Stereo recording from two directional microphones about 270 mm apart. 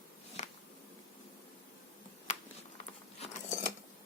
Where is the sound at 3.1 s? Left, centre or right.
Left.